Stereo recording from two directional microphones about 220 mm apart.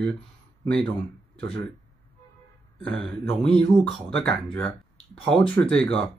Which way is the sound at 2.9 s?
5° left (ahead or behind).